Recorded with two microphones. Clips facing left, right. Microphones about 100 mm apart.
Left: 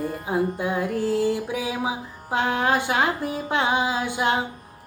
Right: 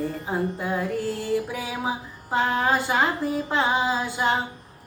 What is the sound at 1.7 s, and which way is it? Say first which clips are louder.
Music: left 1 dB; 5° left (ahead or behind).